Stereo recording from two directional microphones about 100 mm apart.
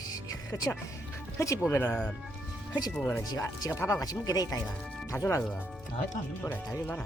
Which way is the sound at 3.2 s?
40° left (ahead or behind).